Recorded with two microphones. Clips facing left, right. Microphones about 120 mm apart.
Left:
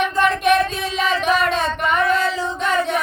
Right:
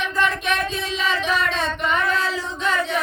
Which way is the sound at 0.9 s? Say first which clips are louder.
Left 5 dB; 55° left (ahead or behind).